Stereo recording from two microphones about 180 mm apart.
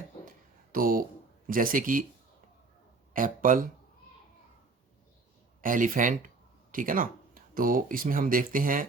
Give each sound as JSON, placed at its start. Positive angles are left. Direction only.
{"t": 0.3, "sound": "a sound", "side_deg": -50}
{"t": 1.5, "sound": "speech", "side_deg": -50}
{"t": 3.1, "sound": "speech", "side_deg": -50}
{"t": 5.6, "sound": "speech", "side_deg": -45}